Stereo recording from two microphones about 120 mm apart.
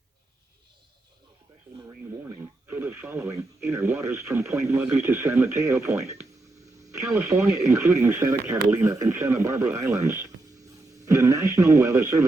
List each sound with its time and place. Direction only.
2.7 s speech: 15° right (ahead or behind)